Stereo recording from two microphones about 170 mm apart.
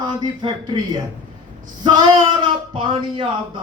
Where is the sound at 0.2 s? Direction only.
30° right (ahead or behind).